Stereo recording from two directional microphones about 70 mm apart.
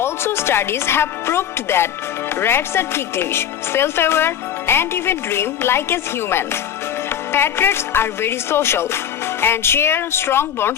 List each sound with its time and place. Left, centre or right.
0.0 s speech: left